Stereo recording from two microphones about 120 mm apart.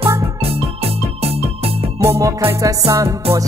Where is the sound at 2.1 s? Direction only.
25° right (ahead or behind).